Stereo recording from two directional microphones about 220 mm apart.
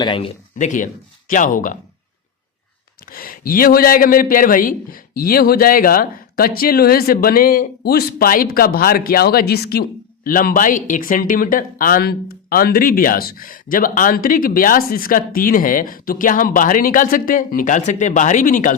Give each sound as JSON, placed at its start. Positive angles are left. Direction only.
{"t": 0.0, "sound": "speech", "side_deg": 25}
{"t": 3.1, "sound": "speech", "side_deg": 40}